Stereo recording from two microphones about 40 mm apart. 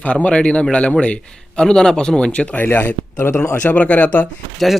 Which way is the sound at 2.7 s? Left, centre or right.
Left.